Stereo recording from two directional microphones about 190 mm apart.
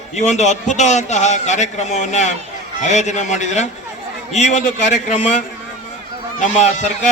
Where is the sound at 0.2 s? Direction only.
35° left (ahead or behind).